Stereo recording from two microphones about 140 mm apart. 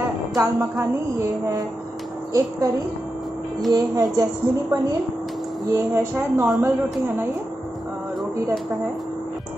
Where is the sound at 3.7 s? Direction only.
25° right (ahead or behind).